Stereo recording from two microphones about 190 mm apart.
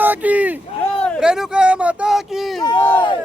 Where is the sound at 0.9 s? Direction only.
5° left (ahead or behind).